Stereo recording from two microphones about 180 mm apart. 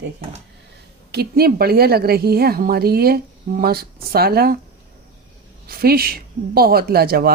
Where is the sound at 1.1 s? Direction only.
60° right (ahead or behind).